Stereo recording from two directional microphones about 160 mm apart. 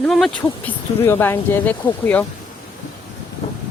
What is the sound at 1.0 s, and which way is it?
Speech, 15° left (ahead or behind).